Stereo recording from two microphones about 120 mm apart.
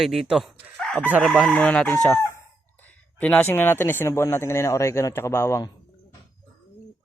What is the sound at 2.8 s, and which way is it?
Speech, 15° left (ahead or behind).